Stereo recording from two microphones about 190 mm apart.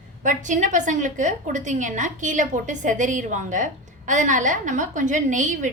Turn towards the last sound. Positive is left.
turn(degrees=-40)  # may be behind; listen again after turning